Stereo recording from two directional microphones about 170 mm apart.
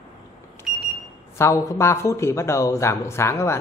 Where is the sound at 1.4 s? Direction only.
20° left (ahead or behind).